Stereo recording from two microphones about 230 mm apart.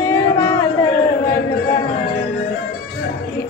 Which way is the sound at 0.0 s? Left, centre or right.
Centre.